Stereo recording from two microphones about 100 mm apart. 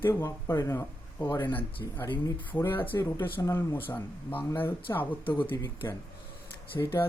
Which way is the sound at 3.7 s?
20° left (ahead or behind).